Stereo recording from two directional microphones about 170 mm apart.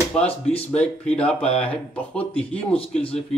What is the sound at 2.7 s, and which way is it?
Speech, 35° left (ahead or behind).